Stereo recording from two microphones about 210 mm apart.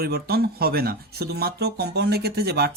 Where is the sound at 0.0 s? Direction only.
50° right (ahead or behind).